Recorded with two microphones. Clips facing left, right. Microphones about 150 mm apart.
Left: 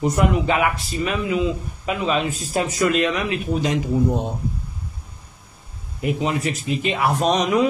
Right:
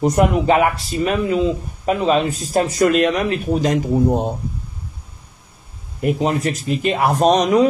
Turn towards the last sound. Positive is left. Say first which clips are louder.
# right 5 dB
turn(degrees=-40)  # may be behind; listen again after turning